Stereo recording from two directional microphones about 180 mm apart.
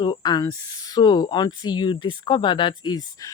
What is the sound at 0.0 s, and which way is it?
Speech, 25° left (ahead or behind).